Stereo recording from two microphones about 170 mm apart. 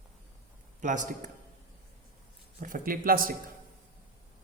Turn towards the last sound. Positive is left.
turn(degrees=-55)  # may be behind; listen again after turning